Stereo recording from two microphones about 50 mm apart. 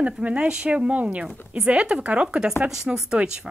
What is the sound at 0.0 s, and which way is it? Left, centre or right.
A woman's voice, right.